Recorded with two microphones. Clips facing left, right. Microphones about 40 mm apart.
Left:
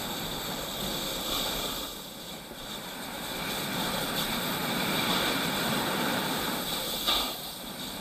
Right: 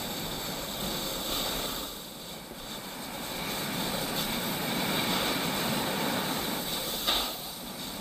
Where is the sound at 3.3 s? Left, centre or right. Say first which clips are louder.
Left 1 dB; left.